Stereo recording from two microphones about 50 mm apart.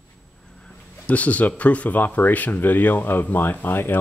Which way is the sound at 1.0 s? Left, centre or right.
Left.